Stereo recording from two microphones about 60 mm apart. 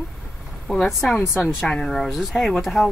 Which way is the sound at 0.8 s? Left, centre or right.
Centre.